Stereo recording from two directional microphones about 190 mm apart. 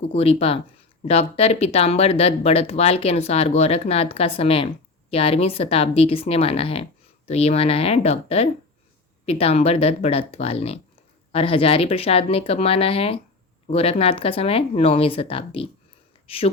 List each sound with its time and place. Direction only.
0.1 s speech: 30° left (ahead or behind)